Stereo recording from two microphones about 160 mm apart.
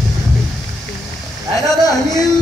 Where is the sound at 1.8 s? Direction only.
25° left (ahead or behind).